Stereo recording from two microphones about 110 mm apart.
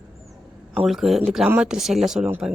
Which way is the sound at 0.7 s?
5° right (ahead or behind).